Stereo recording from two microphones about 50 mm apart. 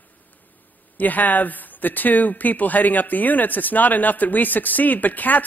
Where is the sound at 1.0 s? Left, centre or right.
Left.